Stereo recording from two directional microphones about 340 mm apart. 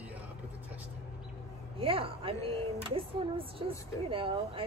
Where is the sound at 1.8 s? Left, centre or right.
Centre.